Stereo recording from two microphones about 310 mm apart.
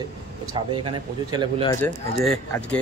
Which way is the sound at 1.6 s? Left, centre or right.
Centre.